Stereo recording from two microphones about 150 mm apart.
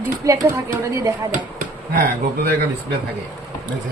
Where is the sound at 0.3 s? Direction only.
20° right (ahead or behind).